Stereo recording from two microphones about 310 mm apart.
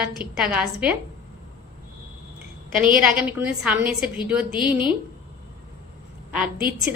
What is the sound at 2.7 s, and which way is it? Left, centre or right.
Speech, right.